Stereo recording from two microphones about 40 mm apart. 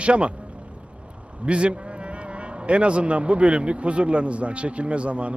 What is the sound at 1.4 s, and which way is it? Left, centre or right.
Speech, right.